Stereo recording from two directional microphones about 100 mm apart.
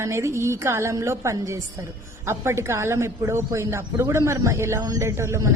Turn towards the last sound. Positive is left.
turn(degrees=-30)  # may be behind; listen again after turning